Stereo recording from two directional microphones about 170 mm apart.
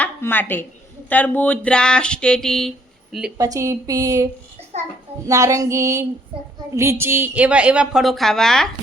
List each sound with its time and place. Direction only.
0.0 s speech: 10° left (ahead or behind)
3.3 s a woman's voice: 20° right (ahead or behind)
5.3 s a woman's voice: 20° right (ahead or behind); by 8.7 s 5° left (ahead or behind)